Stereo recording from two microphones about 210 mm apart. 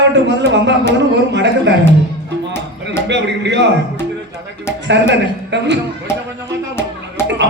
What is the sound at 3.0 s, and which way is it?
Speech, 55° right (ahead or behind).